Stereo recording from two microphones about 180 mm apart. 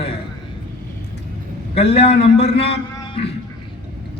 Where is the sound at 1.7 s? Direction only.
35° left (ahead or behind).